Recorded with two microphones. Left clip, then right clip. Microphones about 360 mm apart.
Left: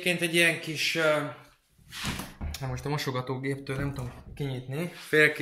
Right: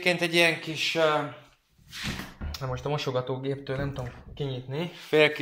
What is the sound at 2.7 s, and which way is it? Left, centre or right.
Speech, centre.